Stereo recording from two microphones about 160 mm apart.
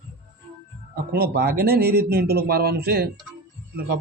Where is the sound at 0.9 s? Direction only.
75° right (ahead or behind).